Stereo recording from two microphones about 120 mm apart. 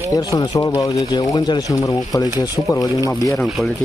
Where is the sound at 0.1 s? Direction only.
30° left (ahead or behind).